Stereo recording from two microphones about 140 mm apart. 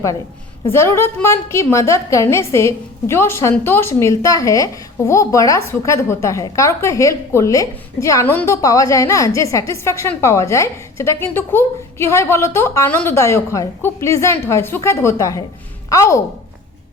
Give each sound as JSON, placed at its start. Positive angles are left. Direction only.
{"t": 0.7, "sound": "a woman's voice", "side_deg": 20}